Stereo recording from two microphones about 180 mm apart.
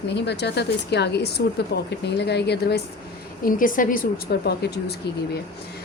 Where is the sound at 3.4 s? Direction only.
50° left (ahead or behind); by 4.9 s 65° left (ahead or behind).